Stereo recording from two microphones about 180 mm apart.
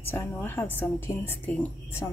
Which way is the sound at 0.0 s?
10° left (ahead or behind).